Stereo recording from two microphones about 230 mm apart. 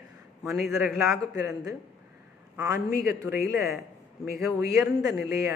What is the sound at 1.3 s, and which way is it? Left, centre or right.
Speech, centre.